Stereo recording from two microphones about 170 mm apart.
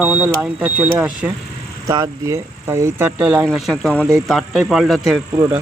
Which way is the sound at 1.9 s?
25° right (ahead or behind).